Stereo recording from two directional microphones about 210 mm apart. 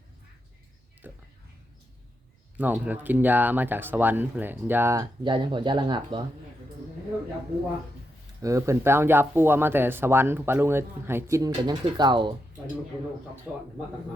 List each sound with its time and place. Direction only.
1.0 s speech: 10° right (ahead or behind)
2.6 s speech: 10° right (ahead or behind)
8.4 s speech: 15° right (ahead or behind)
13.5 s speech: 5° right (ahead or behind)